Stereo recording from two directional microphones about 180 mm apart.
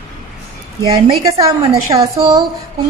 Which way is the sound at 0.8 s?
20° right (ahead or behind).